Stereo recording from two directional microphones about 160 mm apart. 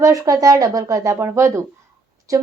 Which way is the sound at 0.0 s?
20° right (ahead or behind).